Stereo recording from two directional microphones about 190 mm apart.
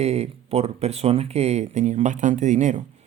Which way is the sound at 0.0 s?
35° right (ahead or behind).